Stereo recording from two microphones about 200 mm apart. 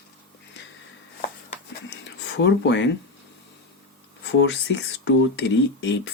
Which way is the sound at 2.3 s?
65° left (ahead or behind).